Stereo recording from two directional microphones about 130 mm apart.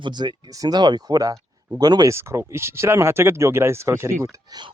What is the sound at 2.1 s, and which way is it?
Speech, 20° right (ahead or behind).